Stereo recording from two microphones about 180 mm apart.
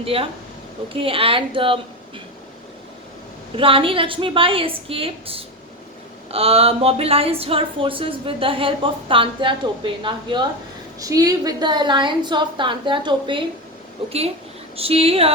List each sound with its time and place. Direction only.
0.0 s a woman's voice: 30° right (ahead or behind)
3.5 s a woman's voice: 30° right (ahead or behind)
14.8 s a woman's voice: 30° right (ahead or behind)